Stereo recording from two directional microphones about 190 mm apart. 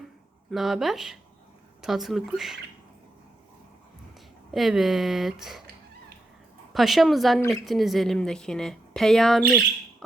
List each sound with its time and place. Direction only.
0.5 s a woman's voice: centre (ahead or behind)
4.5 s a woman's voice: centre (ahead or behind)
6.7 s a woman's voice: centre (ahead or behind)